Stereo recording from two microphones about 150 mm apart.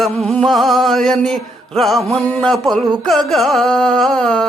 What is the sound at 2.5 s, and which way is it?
Music, centre (ahead or behind).